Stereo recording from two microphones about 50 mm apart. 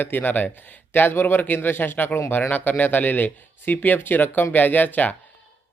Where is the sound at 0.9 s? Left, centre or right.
Left.